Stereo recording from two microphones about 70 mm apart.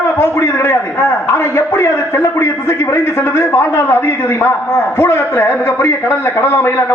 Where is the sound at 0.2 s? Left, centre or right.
Left.